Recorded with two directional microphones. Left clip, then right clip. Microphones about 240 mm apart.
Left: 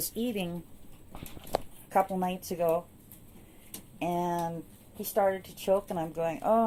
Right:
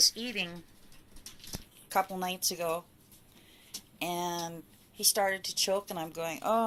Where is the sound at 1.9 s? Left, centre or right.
Centre.